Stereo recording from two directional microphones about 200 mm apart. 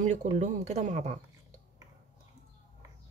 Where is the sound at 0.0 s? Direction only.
35° right (ahead or behind).